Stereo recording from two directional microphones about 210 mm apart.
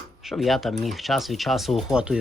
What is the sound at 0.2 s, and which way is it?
Speech, centre (ahead or behind).